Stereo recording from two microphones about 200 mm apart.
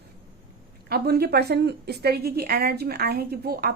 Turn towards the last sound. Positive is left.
turn(degrees=-50)  # may be behind; listen again after turning